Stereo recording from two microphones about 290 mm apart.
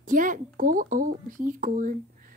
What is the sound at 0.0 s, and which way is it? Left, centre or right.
Speech, right.